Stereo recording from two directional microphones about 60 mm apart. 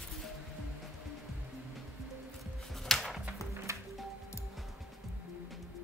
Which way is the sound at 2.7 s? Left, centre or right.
Centre.